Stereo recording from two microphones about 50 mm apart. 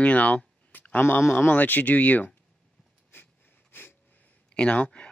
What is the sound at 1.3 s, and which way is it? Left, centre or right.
A man's voice, left.